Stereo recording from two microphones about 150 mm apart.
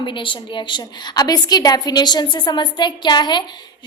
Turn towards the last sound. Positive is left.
turn(degrees=30)  # may be behind; listen again after turning